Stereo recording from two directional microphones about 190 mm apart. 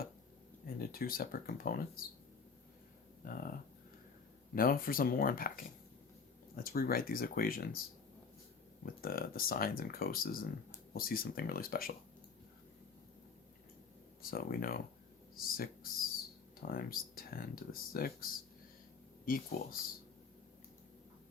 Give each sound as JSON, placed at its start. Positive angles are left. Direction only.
{"t": 0.8, "sound": "speech", "side_deg": 50}
{"t": 3.2, "sound": "speech", "side_deg": 50}
{"t": 4.5, "sound": "speech", "side_deg": 50}
{"t": 8.8, "sound": "speech", "side_deg": 50}
{"t": 14.2, "sound": "speech", "side_deg": 50}